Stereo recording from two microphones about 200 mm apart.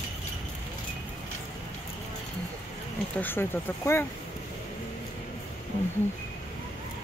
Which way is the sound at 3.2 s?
10° left (ahead or behind).